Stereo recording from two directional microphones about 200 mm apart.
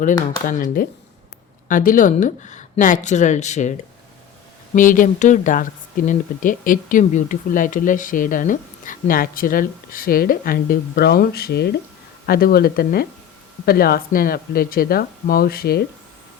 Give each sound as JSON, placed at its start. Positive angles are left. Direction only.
{"t": 0.4, "sound": "speech", "side_deg": 45}
{"t": 4.7, "sound": "speech", "side_deg": 40}